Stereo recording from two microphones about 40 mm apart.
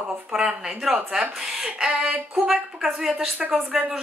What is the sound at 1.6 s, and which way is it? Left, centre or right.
Speech, right.